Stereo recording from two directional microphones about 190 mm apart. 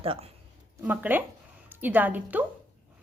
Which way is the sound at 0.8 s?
10° right (ahead or behind).